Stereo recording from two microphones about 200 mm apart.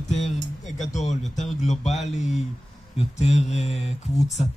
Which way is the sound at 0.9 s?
35° left (ahead or behind).